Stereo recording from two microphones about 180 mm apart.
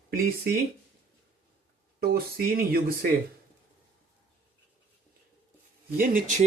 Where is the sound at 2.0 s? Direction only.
60° right (ahead or behind).